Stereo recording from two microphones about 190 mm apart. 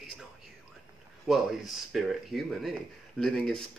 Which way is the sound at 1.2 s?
Centre (ahead or behind).